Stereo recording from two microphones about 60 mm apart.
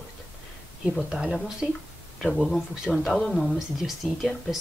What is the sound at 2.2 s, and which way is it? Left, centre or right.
Speech, centre.